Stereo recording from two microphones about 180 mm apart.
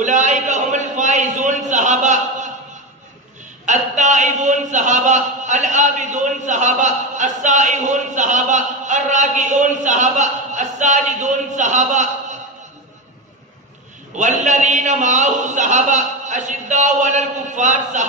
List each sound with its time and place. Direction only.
0.0 s a sound: 45° right (ahead or behind)
3.6 s a man's voice: 45° right (ahead or behind)
14.1 s a man's voice: 45° right (ahead or behind)